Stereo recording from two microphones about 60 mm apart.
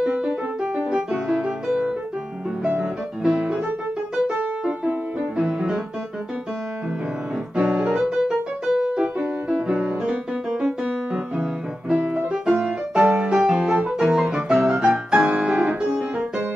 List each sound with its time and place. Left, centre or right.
0.0 s music: centre
0.7 s music: centre
2.8 s music: centre
4.3 s music: right
5.4 s music: centre
7.5 s piano: centre
7.9 s music: centre
12.3 s music: centre
15.0 s piano: centre